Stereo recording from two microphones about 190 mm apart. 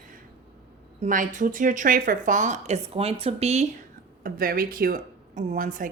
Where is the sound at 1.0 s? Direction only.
45° right (ahead or behind).